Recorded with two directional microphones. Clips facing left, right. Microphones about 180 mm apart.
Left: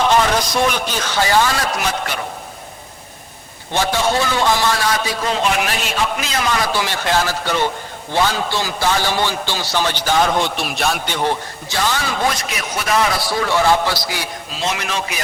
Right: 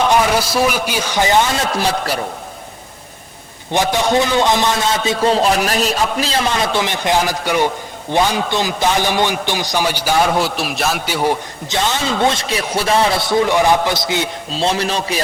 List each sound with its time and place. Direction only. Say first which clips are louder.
0.1 s a man's voice: right 1 dB; 10° right (ahead or behind); by 2.1 s 35° right (ahead or behind)
3.7 s a man's voice: right 2 dB; 15° right (ahead or behind)
11.7 s a man's voice: right 2 dB; 20° right (ahead or behind)